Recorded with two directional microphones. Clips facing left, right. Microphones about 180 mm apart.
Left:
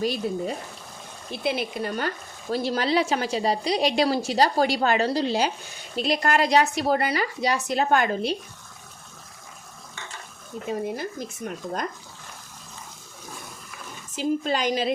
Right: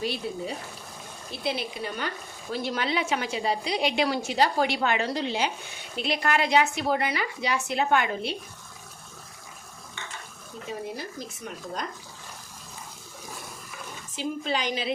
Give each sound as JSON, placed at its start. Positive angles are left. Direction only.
{"t": 0.0, "sound": "a woman's voice", "side_deg": 45}
{"t": 2.5, "sound": "a woman's voice", "side_deg": 35}
{"t": 11.4, "sound": "a woman's voice", "side_deg": 50}
{"t": 14.2, "sound": "a woman's voice", "side_deg": 45}